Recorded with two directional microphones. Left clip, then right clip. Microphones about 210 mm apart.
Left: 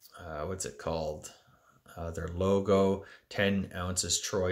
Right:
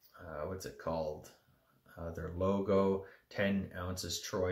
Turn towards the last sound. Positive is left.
turn(degrees=50)  # may be behind; listen again after turning